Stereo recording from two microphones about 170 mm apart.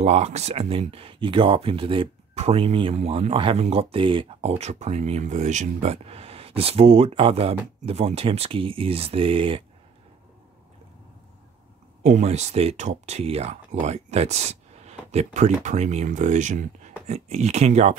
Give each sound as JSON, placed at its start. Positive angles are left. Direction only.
{"t": 0.0, "sound": "speech", "side_deg": -40}
{"t": 12.0, "sound": "speech", "side_deg": -40}